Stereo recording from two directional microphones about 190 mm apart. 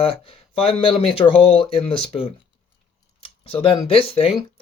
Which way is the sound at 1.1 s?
30° left (ahead or behind).